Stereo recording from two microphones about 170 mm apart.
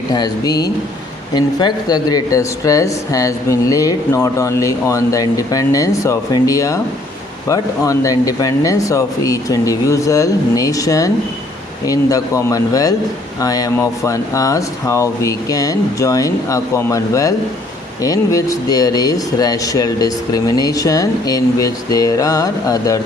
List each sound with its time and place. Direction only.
0.1 s speech: 25° left (ahead or behind)